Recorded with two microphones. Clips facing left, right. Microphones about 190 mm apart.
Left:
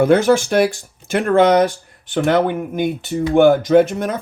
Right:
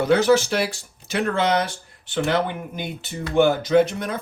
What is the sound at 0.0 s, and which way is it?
Speech, 50° left (ahead or behind).